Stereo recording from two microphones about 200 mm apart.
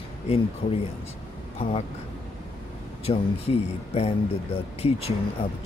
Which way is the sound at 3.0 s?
30° left (ahead or behind).